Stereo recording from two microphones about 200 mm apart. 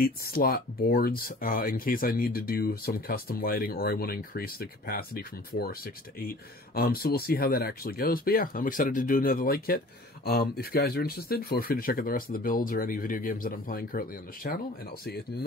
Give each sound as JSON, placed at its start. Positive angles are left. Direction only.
{"t": 0.0, "sound": "speech", "side_deg": 45}